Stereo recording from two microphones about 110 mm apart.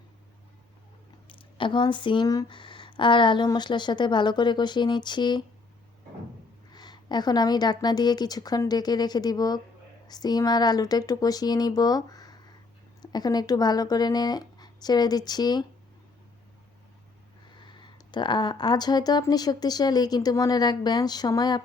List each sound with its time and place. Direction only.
1.3 s speech: 50° left (ahead or behind); by 2.5 s 35° left (ahead or behind)
2.5 s a woman's voice: 50° left (ahead or behind)
6.7 s a woman's voice: 40° left (ahead or behind)
17.6 s a woman's voice: 45° left (ahead or behind)